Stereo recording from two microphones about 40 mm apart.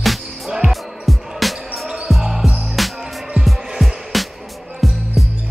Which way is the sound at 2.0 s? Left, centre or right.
Centre.